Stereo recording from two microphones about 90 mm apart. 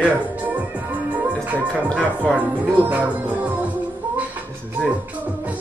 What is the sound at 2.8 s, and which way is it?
Music, 15° right (ahead or behind).